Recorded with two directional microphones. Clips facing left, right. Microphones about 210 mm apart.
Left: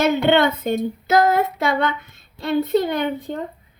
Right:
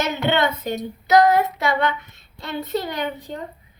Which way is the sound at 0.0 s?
55° left (ahead or behind).